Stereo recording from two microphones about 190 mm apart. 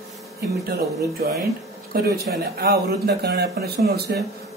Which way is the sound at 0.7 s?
55° right (ahead or behind).